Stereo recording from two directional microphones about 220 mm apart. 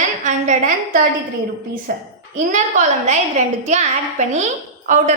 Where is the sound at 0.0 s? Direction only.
35° right (ahead or behind).